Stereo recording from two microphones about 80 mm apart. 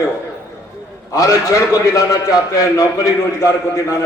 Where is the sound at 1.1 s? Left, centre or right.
Left.